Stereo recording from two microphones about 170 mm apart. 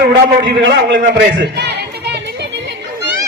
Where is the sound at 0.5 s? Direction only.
90° right.